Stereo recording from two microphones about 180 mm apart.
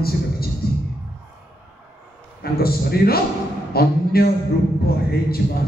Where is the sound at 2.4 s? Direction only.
60° left (ahead or behind).